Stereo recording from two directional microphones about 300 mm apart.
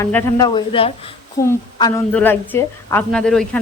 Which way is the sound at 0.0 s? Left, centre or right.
Centre.